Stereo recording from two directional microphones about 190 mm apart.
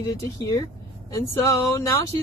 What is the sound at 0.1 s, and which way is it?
Speech, 20° left (ahead or behind).